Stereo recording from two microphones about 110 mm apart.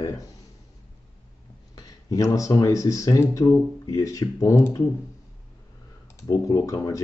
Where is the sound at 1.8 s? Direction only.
35° left (ahead or behind).